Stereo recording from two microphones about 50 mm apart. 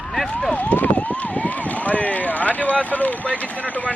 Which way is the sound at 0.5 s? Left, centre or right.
Left.